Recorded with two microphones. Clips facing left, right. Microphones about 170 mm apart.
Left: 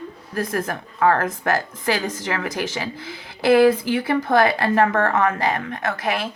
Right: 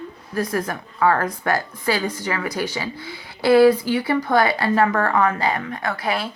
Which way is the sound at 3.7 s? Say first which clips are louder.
Even; 50° left (ahead or behind).